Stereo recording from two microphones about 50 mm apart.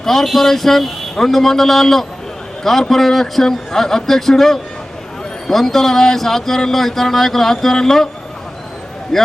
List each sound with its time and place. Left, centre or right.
0.0 s speech: centre
9.1 s a man's voice: centre